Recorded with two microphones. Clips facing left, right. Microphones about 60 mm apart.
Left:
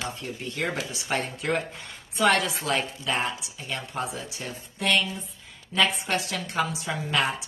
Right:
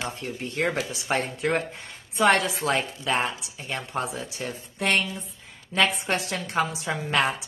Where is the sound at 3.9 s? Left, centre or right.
Right.